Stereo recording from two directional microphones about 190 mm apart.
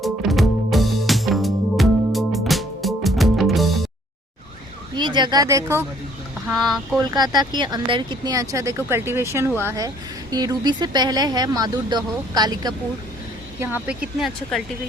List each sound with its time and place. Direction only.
0.0 s music: centre (ahead or behind)
4.9 s speech: 25° right (ahead or behind)
6.5 s speech: centre (ahead or behind)
7.1 s speech: 20° right (ahead or behind)
13.6 s speech: 5° right (ahead or behind)